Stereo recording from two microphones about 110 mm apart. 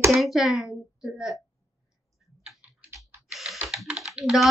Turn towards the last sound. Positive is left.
turn(degrees=-5)  # may be behind; listen again after turning